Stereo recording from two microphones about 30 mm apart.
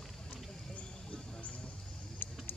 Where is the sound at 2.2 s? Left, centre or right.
Left.